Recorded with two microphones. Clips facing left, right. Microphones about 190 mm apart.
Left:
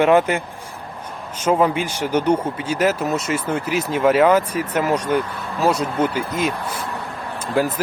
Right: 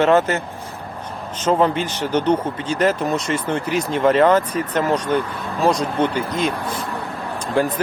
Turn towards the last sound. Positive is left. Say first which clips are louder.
# right 1 dB
turn(degrees=5)  # may be behind; listen again after turning